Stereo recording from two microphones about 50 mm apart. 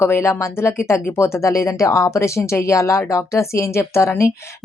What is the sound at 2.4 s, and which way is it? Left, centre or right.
Speech, left.